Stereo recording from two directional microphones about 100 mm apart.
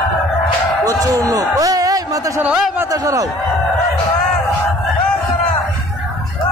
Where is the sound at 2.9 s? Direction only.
35° right (ahead or behind).